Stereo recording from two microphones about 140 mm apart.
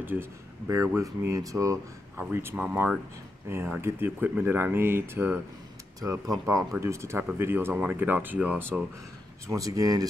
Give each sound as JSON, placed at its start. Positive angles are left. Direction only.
{"t": 0.0, "sound": "speech", "side_deg": -15}
{"t": 9.5, "sound": "speech", "side_deg": -25}